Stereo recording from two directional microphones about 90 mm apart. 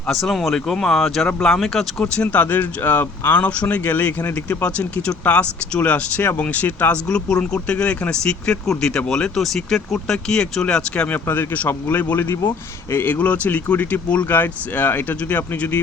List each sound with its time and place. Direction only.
0.1 s speech: centre (ahead or behind)
2.2 s speech: 15° left (ahead or behind)